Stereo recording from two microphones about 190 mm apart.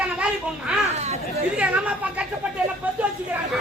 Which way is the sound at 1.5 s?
5° right (ahead or behind).